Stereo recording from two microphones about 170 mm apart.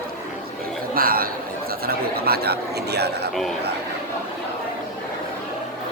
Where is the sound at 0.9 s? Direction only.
60° right (ahead or behind).